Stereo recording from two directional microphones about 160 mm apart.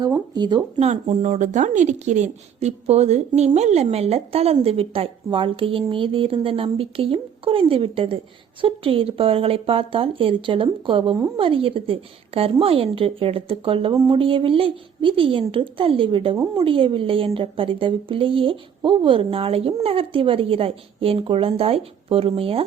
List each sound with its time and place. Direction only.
0.3 s speech: 25° right (ahead or behind)
0.8 s a woman's voice: 45° right (ahead or behind)